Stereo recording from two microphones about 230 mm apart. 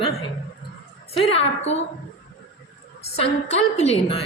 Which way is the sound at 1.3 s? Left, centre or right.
Left.